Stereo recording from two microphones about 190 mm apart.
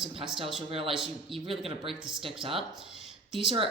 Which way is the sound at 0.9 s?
5° right (ahead or behind).